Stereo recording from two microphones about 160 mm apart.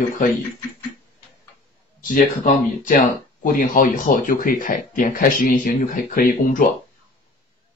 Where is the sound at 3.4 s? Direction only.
65° left (ahead or behind).